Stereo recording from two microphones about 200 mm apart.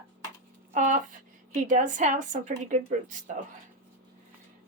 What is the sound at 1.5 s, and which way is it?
A woman's voice, 40° right (ahead or behind).